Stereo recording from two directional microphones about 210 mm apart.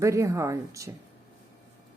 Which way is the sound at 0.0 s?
15° right (ahead or behind).